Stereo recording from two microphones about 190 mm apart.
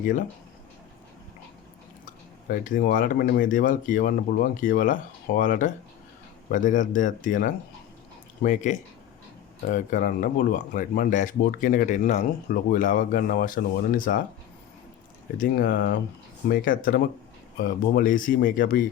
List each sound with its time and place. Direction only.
0.0 s speech: 45° left (ahead or behind)
2.0 s speech: 45° left (ahead or behind)
15.4 s speech: 55° left (ahead or behind)